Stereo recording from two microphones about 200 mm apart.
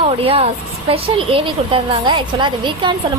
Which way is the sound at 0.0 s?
30° right (ahead or behind).